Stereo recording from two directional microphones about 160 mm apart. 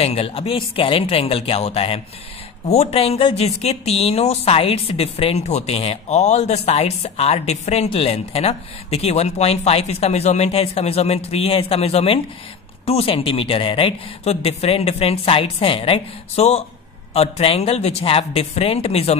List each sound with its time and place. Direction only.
0.0 s speech: 35° left (ahead or behind)